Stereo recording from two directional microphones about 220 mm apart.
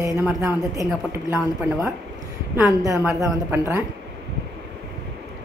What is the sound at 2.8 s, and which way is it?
A woman's voice, 15° right (ahead or behind).